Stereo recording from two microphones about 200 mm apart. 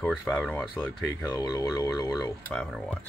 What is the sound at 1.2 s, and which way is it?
Speech, 20° left (ahead or behind).